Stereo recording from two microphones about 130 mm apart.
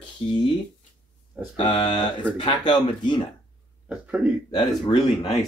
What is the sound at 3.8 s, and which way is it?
Speech, 10° right (ahead or behind).